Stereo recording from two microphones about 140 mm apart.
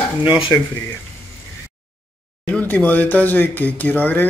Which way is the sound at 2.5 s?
10° left (ahead or behind).